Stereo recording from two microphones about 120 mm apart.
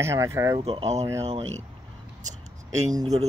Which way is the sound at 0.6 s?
50° right (ahead or behind).